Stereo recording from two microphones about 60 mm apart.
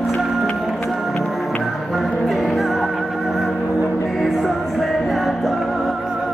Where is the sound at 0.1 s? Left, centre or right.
Centre.